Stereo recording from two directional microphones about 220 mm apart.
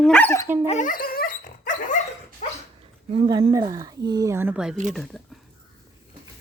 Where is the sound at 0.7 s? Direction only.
35° left (ahead or behind).